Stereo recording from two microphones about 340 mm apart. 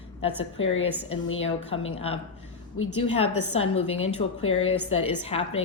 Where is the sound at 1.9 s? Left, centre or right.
Centre.